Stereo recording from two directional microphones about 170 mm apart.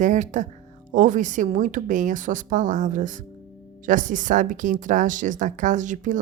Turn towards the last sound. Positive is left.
turn(degrees=-45)  # may be behind; listen again after turning